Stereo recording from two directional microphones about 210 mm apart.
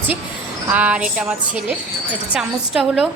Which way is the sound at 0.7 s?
5° right (ahead or behind).